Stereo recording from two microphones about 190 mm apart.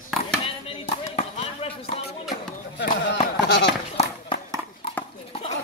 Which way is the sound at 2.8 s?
70° left (ahead or behind).